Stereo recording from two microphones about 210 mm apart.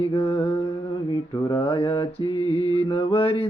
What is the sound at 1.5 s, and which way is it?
Mantra, 20° left (ahead or behind).